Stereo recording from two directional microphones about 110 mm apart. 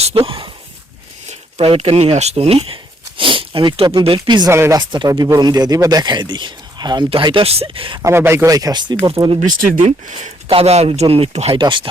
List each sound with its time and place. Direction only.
0.0 s a sound: 55° right (ahead or behind)
1.3 s a sound: 70° right (ahead or behind)
2.1 s speech: 80° right
3.2 s speech: 50° right (ahead or behind)
4.5 s speech: 25° right (ahead or behind)
4.8 s speech: 45° right (ahead or behind)
5.0 s speech: 35° right (ahead or behind)
7.4 s speech: 65° right (ahead or behind)
8.0 s speech: 25° right (ahead or behind); by 9.0 s 40° right (ahead or behind)
9.0 s speech: 60° right (ahead or behind)
9.2 s speech: 40° right (ahead or behind)
9.8 s speech: 80° right
10.5 s speech: 65° right (ahead or behind)
11.5 s speech: 50° right (ahead or behind)